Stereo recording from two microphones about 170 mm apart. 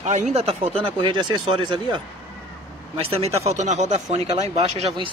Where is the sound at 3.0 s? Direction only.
35° right (ahead or behind).